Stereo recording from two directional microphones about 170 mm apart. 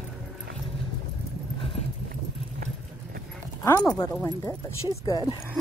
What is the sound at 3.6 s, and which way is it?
Speech, 20° left (ahead or behind).